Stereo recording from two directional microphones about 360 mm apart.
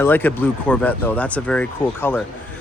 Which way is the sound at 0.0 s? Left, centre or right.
Centre.